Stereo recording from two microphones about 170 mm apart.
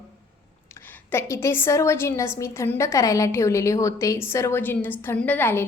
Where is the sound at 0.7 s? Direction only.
10° left (ahead or behind).